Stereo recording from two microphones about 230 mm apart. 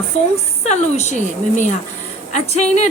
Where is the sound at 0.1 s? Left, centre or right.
Left.